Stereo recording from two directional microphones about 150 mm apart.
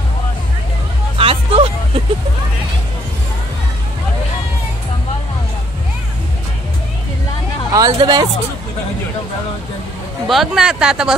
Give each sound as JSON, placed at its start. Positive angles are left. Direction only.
{"t": 1.1, "sound": "hubbub", "side_deg": -40}
{"t": 7.7, "sound": "speech", "side_deg": -25}
{"t": 10.2, "sound": "speech", "side_deg": 0}